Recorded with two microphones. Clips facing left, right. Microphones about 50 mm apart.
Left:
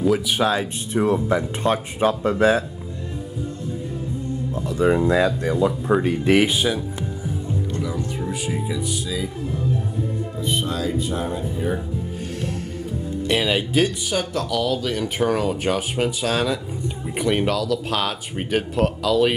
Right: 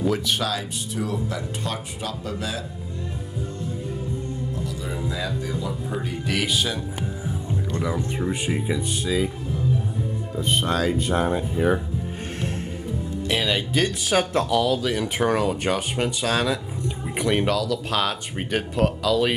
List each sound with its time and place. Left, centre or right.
0.4 s speech: left
4.6 s music: left
4.8 s speech: left
6.2 s speech: left
7.8 s speech: right
10.4 s speech: right
13.3 s speech: centre